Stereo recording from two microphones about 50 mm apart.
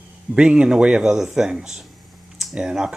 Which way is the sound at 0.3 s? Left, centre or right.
Right.